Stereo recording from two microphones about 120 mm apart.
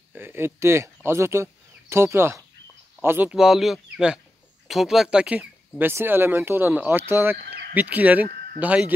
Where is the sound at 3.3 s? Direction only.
5° right (ahead or behind).